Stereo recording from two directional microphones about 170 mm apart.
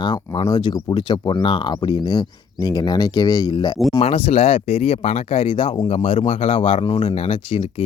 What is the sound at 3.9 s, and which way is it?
Speech, 35° left (ahead or behind).